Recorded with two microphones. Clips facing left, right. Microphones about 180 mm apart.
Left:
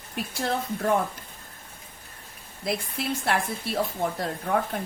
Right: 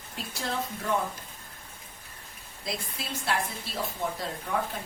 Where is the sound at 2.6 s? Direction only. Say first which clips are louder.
Left 7 dB; 55° left (ahead or behind).